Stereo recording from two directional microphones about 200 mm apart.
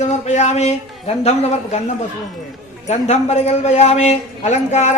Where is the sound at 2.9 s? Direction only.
35° left (ahead or behind).